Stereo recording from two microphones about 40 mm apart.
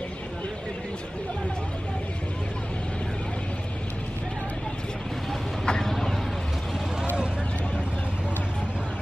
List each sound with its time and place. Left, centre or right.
5.7 s vehicle: centre